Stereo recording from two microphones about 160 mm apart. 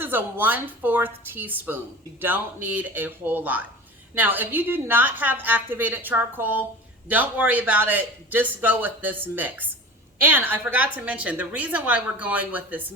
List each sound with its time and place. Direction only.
0.0 s a woman's voice: 10° right (ahead or behind)